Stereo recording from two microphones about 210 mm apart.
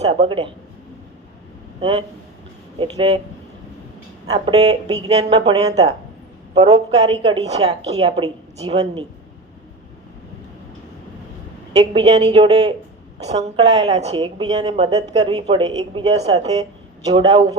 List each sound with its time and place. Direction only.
0.0 s a woman's voice: 25° right (ahead or behind)
1.8 s a woman's voice: 20° right (ahead or behind)
4.3 s a woman's voice: 25° right (ahead or behind)
11.9 s a woman's voice: 30° right (ahead or behind)